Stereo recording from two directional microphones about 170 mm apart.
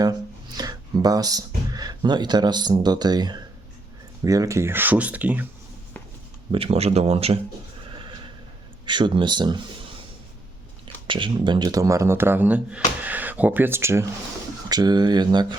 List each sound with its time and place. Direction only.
0.0 s a sound: 25° right (ahead or behind)
4.2 s speech: 20° right (ahead or behind)
6.5 s speech: 35° right (ahead or behind)
8.9 s speech: 25° right (ahead or behind)
11.0 s speech: 30° right (ahead or behind)